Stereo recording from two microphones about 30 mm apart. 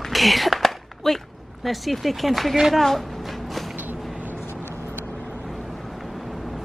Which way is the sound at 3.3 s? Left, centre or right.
Centre.